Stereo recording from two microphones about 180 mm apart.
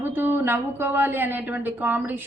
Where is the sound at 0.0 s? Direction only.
10° right (ahead or behind).